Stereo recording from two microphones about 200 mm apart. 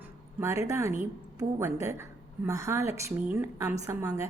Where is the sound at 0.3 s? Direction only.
15° right (ahead or behind).